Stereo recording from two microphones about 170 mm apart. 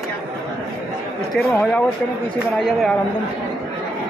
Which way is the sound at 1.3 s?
5° left (ahead or behind).